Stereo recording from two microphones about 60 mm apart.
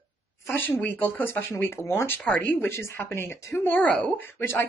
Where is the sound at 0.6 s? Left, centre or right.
Left.